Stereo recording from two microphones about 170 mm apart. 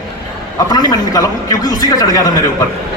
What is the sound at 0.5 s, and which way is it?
A man's voice, 25° left (ahead or behind).